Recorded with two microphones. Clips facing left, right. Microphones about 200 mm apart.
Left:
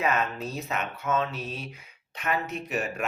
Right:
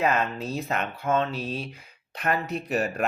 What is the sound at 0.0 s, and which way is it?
Speech, 35° right (ahead or behind).